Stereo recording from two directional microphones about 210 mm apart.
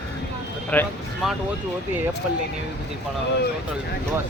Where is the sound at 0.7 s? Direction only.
5° left (ahead or behind).